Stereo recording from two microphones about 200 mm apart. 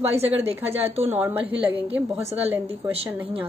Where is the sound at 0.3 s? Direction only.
10° right (ahead or behind).